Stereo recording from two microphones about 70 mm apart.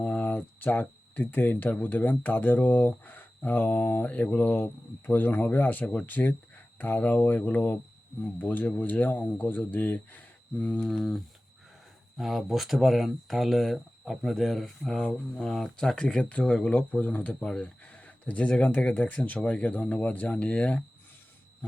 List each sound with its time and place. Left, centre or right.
0.0 s speech: left
10.8 s speech: centre